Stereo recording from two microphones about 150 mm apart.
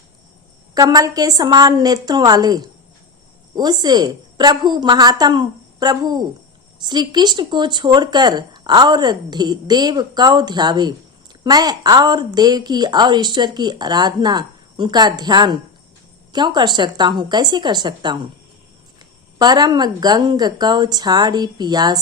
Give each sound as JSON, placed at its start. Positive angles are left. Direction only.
{"t": 0.7, "sound": "speech", "side_deg": -25}
{"t": 19.4, "sound": "speech", "side_deg": -25}